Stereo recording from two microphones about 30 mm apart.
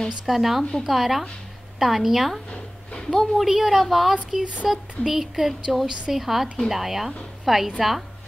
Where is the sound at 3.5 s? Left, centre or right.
Centre.